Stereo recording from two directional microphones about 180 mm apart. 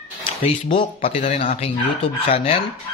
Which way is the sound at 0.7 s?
30° left (ahead or behind).